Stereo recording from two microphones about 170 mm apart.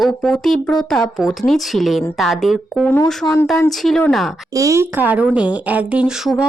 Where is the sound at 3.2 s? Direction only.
15° left (ahead or behind).